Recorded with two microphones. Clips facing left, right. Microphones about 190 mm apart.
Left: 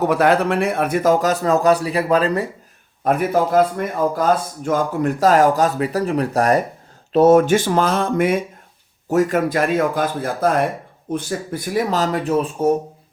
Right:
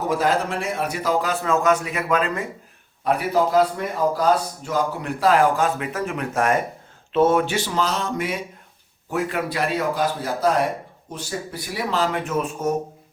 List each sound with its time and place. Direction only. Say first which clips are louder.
0.1 s a man's voice: left 5 dB; 65° left (ahead or behind); by 2.5 s 35° left (ahead or behind)
3.0 s a man's voice: left 3 dB; 50° left (ahead or behind)
9.0 s a man's voice: left 8 dB; 45° left (ahead or behind)